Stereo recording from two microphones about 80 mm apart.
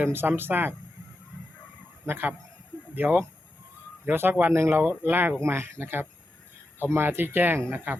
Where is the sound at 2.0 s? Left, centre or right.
Right.